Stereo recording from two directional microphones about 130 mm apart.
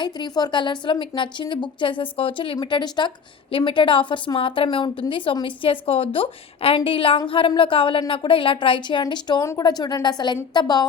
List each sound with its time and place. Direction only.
0.0 s a woman's voice: 35° left (ahead or behind)
9.4 s a woman's voice: 25° left (ahead or behind)